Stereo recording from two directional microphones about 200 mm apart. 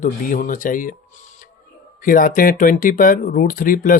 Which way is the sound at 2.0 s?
45° left (ahead or behind).